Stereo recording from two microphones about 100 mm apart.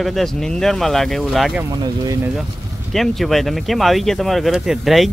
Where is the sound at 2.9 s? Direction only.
Centre (ahead or behind).